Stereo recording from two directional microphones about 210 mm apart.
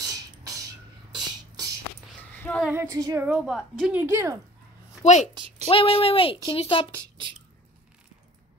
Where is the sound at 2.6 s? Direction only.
10° right (ahead or behind).